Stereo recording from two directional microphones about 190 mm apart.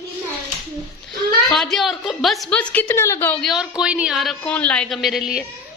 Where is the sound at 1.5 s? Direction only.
Centre (ahead or behind).